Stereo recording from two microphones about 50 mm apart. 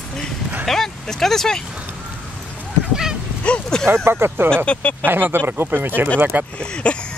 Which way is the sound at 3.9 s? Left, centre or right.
Right.